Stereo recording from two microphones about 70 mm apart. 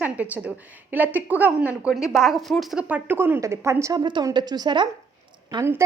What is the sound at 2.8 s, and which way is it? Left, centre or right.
Speech, right.